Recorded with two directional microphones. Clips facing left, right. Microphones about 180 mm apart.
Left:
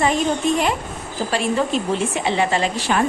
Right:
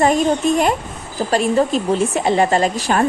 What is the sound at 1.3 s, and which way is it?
A woman's voice, 40° right (ahead or behind).